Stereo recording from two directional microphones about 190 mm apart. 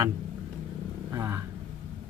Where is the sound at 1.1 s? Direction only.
10° right (ahead or behind).